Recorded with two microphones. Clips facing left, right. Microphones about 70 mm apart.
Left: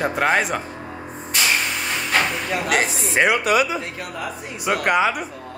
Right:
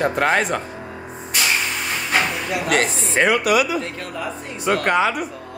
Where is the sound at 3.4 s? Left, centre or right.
Left.